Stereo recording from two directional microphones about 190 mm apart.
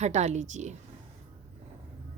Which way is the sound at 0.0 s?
35° right (ahead or behind).